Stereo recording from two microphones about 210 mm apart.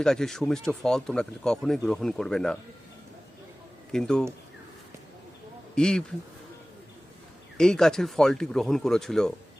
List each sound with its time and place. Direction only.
0.0 s speech: centre (ahead or behind)
3.9 s speech: 5° left (ahead or behind)
5.7 s speech: 5° left (ahead or behind)
7.6 s speech: 5° left (ahead or behind)